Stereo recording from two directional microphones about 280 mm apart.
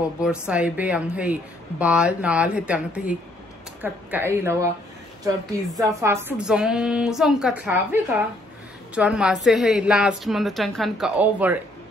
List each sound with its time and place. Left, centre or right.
0.2 s a woman's voice: centre
5.8 s a woman's voice: centre